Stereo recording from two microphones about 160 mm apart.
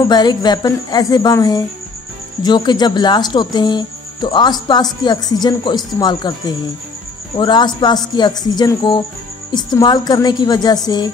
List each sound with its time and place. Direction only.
0.1 s speech: 25° left (ahead or behind)